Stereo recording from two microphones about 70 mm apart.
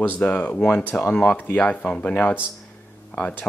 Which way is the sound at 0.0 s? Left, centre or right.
Left.